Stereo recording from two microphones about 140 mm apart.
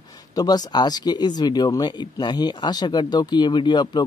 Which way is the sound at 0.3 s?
25° left (ahead or behind).